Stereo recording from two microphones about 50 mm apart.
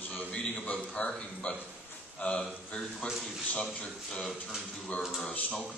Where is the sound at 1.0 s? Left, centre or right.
Centre.